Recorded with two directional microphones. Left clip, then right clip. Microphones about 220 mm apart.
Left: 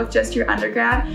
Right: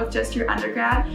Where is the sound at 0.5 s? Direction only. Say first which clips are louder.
Left 4 dB; centre (ahead or behind).